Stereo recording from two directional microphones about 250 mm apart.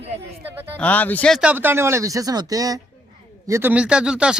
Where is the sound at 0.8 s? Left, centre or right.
Centre.